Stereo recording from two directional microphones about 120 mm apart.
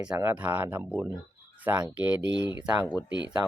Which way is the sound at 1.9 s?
15° right (ahead or behind).